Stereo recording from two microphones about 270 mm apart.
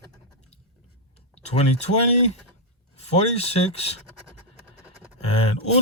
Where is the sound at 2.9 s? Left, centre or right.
Left.